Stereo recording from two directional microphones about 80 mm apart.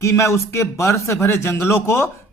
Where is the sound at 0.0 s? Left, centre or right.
Left.